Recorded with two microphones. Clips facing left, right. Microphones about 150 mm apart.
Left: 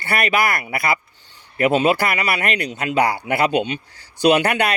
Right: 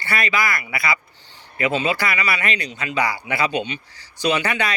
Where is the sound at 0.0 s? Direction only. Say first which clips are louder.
Left 3 dB; 55° left (ahead or behind).